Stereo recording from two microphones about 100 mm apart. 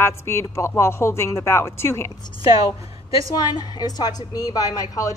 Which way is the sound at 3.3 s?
45° left (ahead or behind).